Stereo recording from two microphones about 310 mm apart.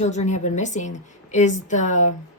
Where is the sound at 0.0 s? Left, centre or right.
Left.